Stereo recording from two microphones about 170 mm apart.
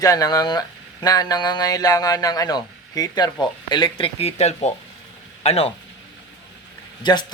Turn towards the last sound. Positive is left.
turn(degrees=25)  # may be behind; listen again after turning